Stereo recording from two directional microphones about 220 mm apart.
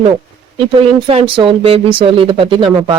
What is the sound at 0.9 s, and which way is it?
Speech, 25° right (ahead or behind).